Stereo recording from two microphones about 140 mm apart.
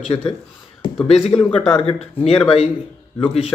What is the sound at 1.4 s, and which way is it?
Speech, 35° left (ahead or behind).